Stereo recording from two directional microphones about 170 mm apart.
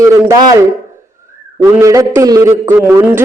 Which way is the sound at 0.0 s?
20° right (ahead or behind).